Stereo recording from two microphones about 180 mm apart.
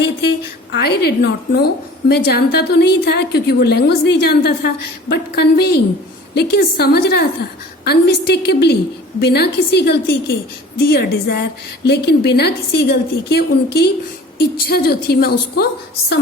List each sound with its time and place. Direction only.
0.2 s a woman's voice: 65° left (ahead or behind)